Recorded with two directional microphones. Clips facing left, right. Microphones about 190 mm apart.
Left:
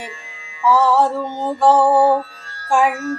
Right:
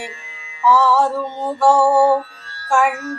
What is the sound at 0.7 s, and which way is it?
Music, 15° left (ahead or behind).